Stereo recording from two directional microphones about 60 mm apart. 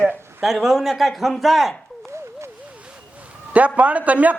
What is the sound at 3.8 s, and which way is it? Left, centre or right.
Speech, right.